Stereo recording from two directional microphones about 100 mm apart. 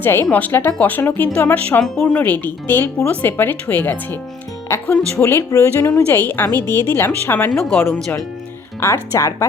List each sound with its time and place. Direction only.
0.0 s speech: 20° left (ahead or behind)
6.1 s speech: 20° left (ahead or behind)
7.5 s speech: centre (ahead or behind)
8.8 s speech: 30° left (ahead or behind)